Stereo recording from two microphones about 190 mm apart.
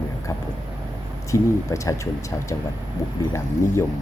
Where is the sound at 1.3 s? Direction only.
15° left (ahead or behind).